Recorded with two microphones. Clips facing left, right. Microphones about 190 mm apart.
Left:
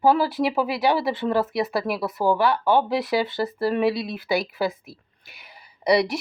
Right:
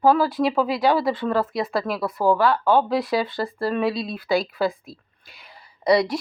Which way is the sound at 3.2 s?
25° left (ahead or behind).